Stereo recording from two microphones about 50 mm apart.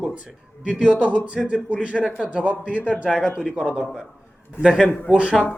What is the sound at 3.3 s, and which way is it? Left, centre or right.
A man's voice, centre.